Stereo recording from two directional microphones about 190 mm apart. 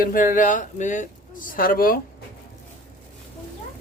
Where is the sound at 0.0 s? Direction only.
45° left (ahead or behind).